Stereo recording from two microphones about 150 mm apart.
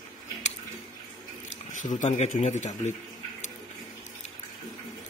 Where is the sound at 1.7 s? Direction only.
55° left (ahead or behind).